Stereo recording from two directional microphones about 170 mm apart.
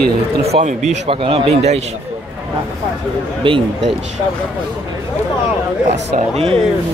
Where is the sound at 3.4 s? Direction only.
30° right (ahead or behind).